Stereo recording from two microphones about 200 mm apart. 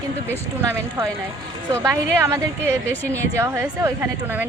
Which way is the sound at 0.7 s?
15° right (ahead or behind).